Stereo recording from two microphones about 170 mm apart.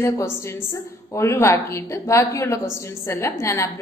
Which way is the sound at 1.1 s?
15° left (ahead or behind).